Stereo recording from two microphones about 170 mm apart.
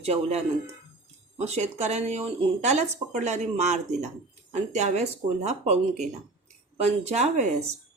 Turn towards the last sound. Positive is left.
turn(degrees=-40)  # may be behind; listen again after turning